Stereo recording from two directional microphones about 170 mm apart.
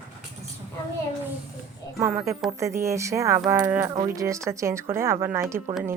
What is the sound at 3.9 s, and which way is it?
Speech, 25° right (ahead or behind).